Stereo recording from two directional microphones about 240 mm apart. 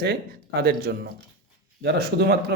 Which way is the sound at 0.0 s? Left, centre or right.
Right.